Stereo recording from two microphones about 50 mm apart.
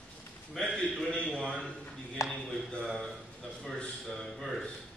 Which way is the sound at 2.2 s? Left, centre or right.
Left.